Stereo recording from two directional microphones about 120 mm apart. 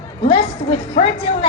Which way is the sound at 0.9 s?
50° left (ahead or behind).